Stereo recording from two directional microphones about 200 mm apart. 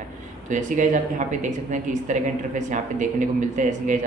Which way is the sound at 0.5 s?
40° right (ahead or behind).